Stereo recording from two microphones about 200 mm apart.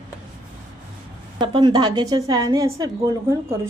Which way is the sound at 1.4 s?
20° right (ahead or behind).